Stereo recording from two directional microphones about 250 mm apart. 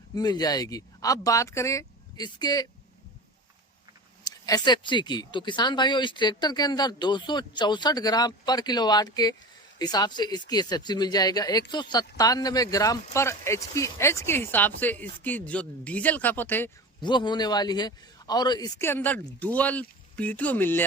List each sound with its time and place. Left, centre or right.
0.1 s speech: centre
4.3 s speech: centre
17.0 s speech: centre